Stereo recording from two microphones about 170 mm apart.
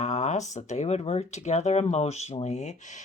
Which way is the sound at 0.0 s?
45° left (ahead or behind).